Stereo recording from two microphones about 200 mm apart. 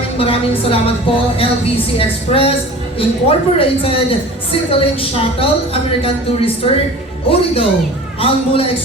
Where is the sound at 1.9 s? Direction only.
30° left (ahead or behind).